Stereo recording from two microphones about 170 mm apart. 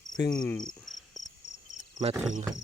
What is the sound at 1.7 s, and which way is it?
Cricket, 35° right (ahead or behind).